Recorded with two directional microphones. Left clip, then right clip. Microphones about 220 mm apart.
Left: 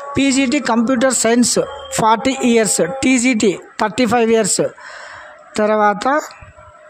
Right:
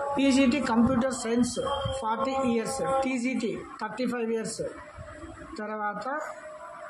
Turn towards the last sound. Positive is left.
turn(degrees=50)  # may be behind; listen again after turning